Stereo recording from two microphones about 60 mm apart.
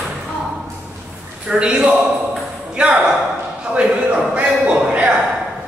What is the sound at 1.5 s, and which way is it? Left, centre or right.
A man's voice, centre.